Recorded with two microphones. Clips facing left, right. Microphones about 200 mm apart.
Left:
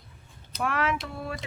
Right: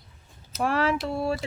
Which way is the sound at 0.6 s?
30° right (ahead or behind).